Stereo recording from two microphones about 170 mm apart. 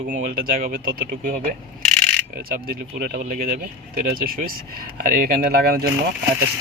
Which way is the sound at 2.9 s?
60° right (ahead or behind).